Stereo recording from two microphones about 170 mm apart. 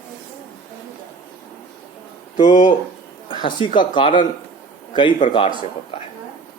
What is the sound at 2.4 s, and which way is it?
Speech, 45° left (ahead or behind).